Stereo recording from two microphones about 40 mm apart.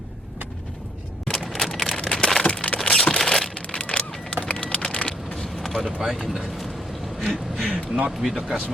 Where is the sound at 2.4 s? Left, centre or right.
Left.